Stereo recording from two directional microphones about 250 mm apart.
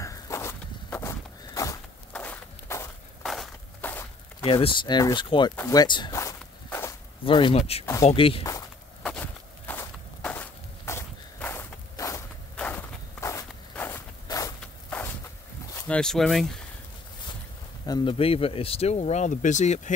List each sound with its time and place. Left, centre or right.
0.0 s walk: centre
3.3 s a sound: centre
4.5 s speech: left
5.6 s walk: centre
7.8 s speech: centre
9.0 s walk: centre
15.7 s speech: centre
17.8 s speech: centre